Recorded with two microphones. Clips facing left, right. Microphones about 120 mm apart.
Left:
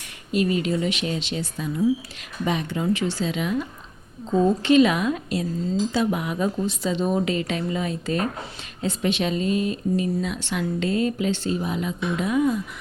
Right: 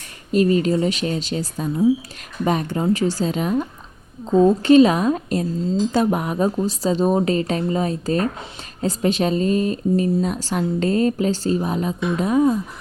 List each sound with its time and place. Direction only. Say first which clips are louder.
0.3 s speech: right 5 dB; 40° right (ahead or behind)